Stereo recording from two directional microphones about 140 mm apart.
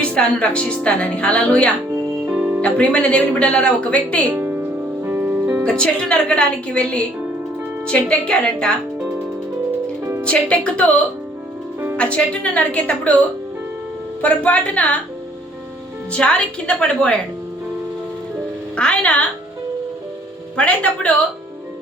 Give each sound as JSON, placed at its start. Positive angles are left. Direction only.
{"t": 0.0, "sound": "a woman's voice", "side_deg": 10}
{"t": 2.2, "sound": "music", "side_deg": -10}
{"t": 2.6, "sound": "a woman's voice", "side_deg": 10}
{"t": 4.3, "sound": "music", "side_deg": -15}
{"t": 5.6, "sound": "a woman's voice", "side_deg": 5}
{"t": 10.0, "sound": "music", "side_deg": -15}
{"t": 10.2, "sound": "a woman's voice", "side_deg": 10}
{"t": 11.9, "sound": "a woman's voice", "side_deg": 10}
{"t": 14.2, "sound": "a woman's voice", "side_deg": 10}
{"t": 16.1, "sound": "a woman's voice", "side_deg": 5}
{"t": 18.8, "sound": "a woman's voice", "side_deg": 5}
{"t": 20.6, "sound": "a woman's voice", "side_deg": 10}